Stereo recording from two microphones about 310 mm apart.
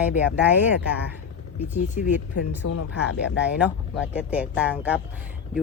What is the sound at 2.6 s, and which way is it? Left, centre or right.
Speech, left.